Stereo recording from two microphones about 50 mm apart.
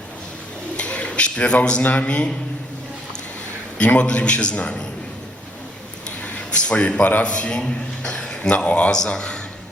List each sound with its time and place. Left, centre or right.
0.8 s a man's voice: left
3.8 s a man's voice: left
6.2 s a man's voice: left